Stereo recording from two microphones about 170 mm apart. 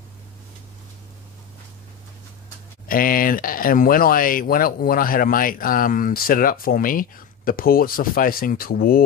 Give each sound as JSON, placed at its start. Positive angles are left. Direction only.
{"t": 2.9, "sound": "speech", "side_deg": 55}